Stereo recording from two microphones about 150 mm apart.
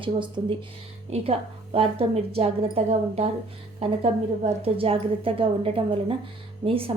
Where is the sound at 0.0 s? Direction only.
35° right (ahead or behind).